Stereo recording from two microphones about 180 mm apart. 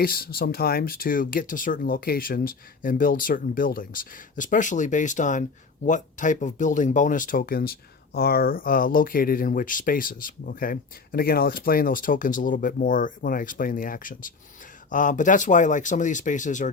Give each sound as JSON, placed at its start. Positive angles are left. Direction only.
{"t": 0.0, "sound": "speech", "side_deg": 55}